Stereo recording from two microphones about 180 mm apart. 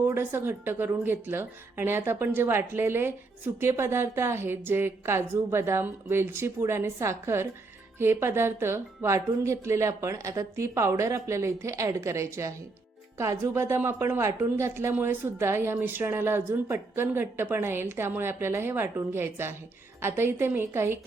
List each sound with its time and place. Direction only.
0.1 s speech: 10° right (ahead or behind)